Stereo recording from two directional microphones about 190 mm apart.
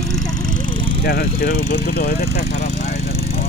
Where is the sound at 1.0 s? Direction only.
50° left (ahead or behind).